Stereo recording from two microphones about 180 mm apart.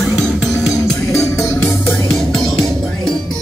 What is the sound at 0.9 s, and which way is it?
Music, 15° left (ahead or behind).